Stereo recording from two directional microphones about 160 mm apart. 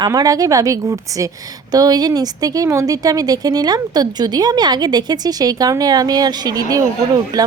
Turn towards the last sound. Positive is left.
turn(degrees=-25)  # may be behind; listen again after turning